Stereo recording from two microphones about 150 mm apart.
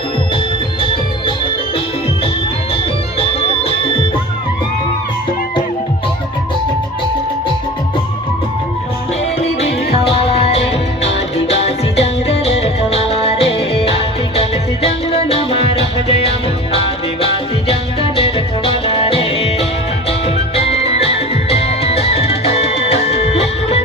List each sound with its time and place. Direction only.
3.2 s music: 40° left (ahead or behind)
9.6 s music: 40° left (ahead or behind)
17.7 s music: 40° left (ahead or behind)